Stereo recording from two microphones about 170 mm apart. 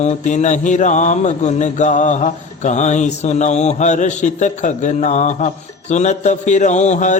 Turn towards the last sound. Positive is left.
turn(degrees=45)  # may be behind; listen again after turning